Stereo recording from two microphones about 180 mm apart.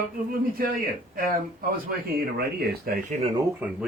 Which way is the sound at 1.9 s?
55° right (ahead or behind).